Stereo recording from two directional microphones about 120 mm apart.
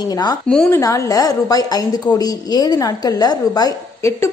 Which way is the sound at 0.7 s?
25° left (ahead or behind).